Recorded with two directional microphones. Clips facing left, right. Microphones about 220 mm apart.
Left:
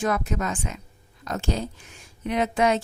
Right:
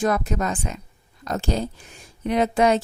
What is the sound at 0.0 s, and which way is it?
A woman's voice, 35° right (ahead or behind).